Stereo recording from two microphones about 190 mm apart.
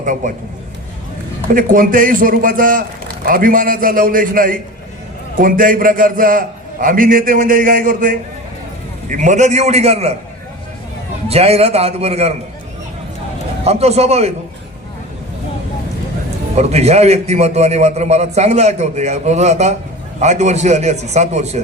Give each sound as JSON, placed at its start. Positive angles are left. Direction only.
{"t": 0.0, "sound": "a man's voice", "side_deg": -45}
{"t": 1.5, "sound": "a man's voice", "side_deg": -50}
{"t": 11.3, "sound": "a man's voice", "side_deg": -30}
{"t": 13.7, "sound": "a man's voice", "side_deg": -35}
{"t": 16.6, "sound": "a man's voice", "side_deg": -35}